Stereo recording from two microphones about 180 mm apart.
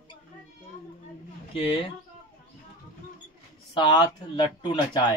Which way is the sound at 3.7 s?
25° left (ahead or behind).